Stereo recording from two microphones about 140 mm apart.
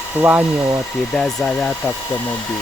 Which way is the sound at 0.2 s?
10° right (ahead or behind).